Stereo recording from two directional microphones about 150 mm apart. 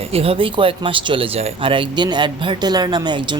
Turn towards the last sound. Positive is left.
turn(degrees=-30)  # may be behind; listen again after turning